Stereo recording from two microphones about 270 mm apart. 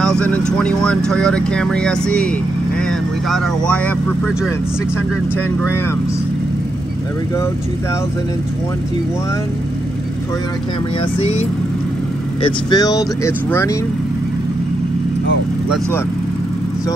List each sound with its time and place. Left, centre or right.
0.0 s vehicle: centre
0.5 s speech: centre
11.1 s speech: left